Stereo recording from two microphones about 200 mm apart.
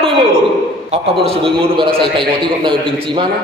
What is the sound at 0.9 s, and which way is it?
A man's voice, 30° right (ahead or behind).